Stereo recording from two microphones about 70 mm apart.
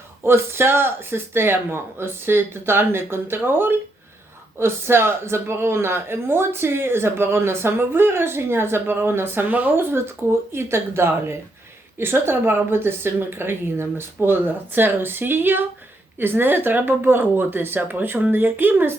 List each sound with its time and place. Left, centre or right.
0.3 s speech: right